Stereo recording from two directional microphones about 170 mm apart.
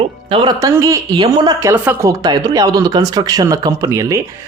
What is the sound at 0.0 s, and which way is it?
Speech, 30° right (ahead or behind).